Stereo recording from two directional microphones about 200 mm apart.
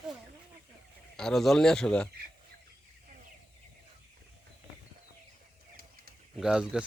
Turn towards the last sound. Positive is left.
turn(degrees=-5)  # may be behind; listen again after turning